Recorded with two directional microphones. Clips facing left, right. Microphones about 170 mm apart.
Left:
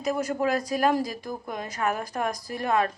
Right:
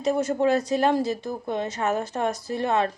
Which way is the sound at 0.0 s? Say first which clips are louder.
Right 4 dB; 30° right (ahead or behind).